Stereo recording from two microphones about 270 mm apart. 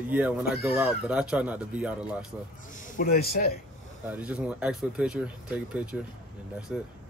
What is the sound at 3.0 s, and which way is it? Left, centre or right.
Speech, left.